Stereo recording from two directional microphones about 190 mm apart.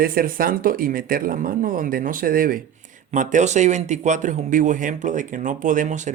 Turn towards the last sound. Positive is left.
turn(degrees=-40)  # may be behind; listen again after turning